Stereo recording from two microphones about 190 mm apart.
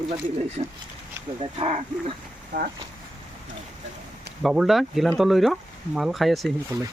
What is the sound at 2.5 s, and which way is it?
Speech, 55° right (ahead or behind).